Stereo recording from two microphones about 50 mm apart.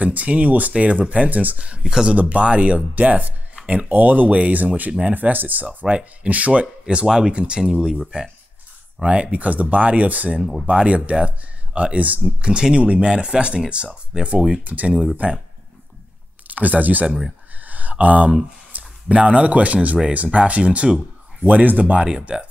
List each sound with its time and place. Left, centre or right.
0.0 s speech: right
1.9 s speech: centre
2.1 s speech: right
3.6 s a sound: centre
3.9 s speech: right; by 8.0 s centre
9.0 s speech: right
10.4 s speech: centre
10.9 s speech: right
12.4 s speech: centre
14.6 s speech: right
16.4 s speech: right
17.6 s a sound: right
18.7 s speech: right